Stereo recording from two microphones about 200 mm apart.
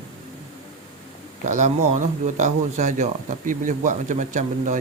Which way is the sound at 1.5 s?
35° right (ahead or behind).